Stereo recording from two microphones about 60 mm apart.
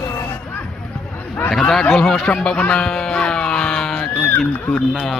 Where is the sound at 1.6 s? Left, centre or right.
Centre.